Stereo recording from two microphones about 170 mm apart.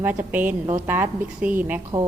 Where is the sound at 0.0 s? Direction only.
10° right (ahead or behind).